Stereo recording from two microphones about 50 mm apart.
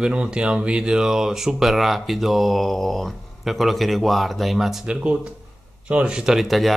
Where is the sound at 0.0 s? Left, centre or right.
Centre.